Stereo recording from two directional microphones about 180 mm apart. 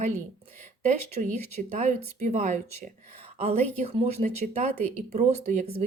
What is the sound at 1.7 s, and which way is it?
Speech, 40° right (ahead or behind).